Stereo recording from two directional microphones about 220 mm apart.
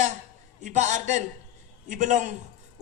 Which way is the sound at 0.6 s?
35° right (ahead or behind).